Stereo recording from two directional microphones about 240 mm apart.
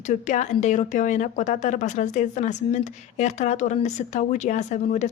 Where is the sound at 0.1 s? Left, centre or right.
Left.